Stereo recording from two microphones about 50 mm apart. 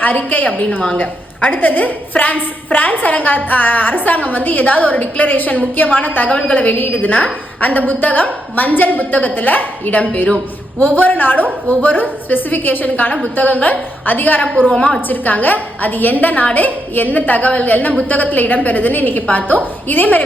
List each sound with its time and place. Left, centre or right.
0.0 s a woman's voice: left
1.5 s a woman's voice: left
14.5 s a woman's voice: centre
15.0 s a woman's voice: left